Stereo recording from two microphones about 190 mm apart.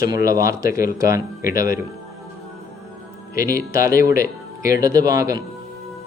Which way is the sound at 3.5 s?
15° right (ahead or behind).